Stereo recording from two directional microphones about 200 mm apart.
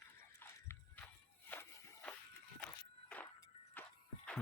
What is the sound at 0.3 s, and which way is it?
Walk, 15° left (ahead or behind).